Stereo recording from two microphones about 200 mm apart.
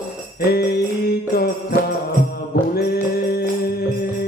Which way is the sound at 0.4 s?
50° left (ahead or behind).